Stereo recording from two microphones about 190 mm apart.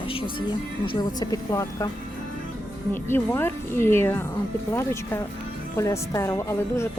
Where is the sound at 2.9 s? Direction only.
10° left (ahead or behind).